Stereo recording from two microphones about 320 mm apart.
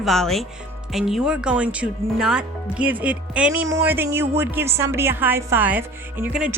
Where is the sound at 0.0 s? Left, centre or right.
Centre.